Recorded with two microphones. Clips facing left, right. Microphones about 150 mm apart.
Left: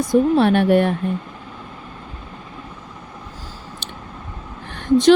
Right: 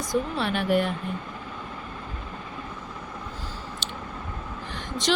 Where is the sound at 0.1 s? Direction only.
55° left (ahead or behind).